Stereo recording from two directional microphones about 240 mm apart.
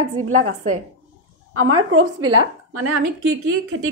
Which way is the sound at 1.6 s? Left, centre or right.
Right.